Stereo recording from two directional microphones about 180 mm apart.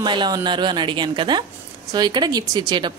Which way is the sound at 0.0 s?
25° right (ahead or behind).